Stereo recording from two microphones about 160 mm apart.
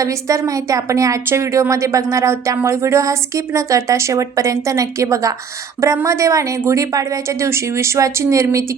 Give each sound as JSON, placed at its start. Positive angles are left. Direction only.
{"t": 0.0, "sound": "a woman's voice", "side_deg": -20}